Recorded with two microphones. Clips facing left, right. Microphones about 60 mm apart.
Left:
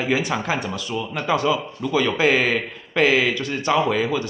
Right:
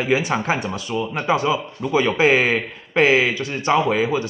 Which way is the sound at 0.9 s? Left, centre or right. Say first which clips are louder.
Right 2 dB; right.